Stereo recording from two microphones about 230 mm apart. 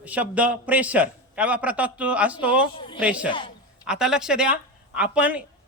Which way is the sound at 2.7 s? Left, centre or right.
Left.